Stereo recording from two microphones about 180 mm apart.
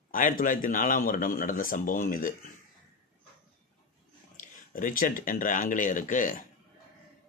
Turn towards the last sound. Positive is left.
turn(degrees=45)  # may be behind; listen again after turning